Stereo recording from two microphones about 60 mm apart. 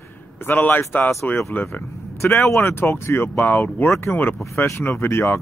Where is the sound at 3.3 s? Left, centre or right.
Left.